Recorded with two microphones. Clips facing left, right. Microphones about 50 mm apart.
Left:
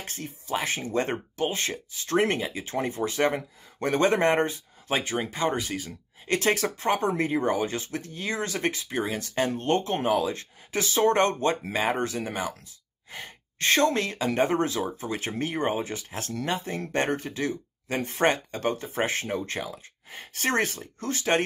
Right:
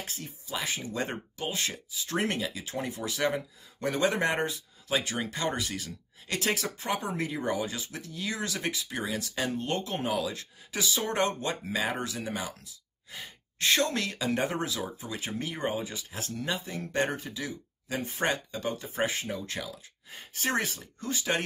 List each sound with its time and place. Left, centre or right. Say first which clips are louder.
0.0 s speech: left 3 dB; left
6.2 s speech: left 6 dB; left
20.3 s speech: left 4 dB; left